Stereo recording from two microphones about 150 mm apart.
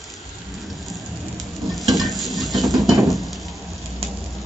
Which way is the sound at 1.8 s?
Centre (ahead or behind).